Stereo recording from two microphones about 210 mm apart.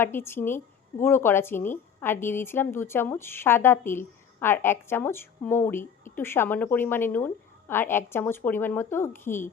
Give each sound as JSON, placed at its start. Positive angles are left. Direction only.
{"t": 0.0, "sound": "a woman's voice", "side_deg": 10}